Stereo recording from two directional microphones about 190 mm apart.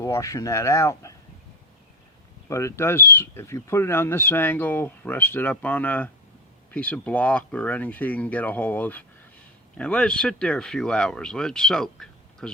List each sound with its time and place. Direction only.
0.0 s speech: 15° left (ahead or behind)
2.5 s speech: 15° left (ahead or behind)